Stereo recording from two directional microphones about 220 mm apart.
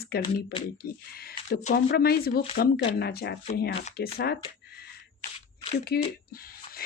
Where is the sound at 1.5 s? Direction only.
45° left (ahead or behind).